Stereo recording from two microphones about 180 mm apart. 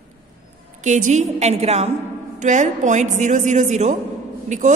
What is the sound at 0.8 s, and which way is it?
A woman's voice, 40° right (ahead or behind).